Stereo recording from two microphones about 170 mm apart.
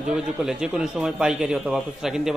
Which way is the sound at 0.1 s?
5° right (ahead or behind).